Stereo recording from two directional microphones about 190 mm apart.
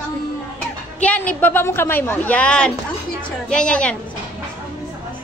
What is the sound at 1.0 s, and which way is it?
A woman's voice, 5° left (ahead or behind).